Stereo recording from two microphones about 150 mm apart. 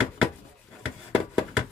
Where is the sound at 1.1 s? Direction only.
35° left (ahead or behind).